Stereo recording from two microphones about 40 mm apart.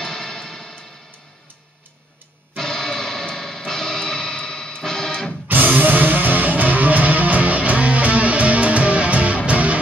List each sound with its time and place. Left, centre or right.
0.0 s music: centre
2.5 s music: centre
5.5 s music: right